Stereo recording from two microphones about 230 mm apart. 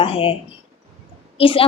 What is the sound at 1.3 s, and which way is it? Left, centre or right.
Speech, left.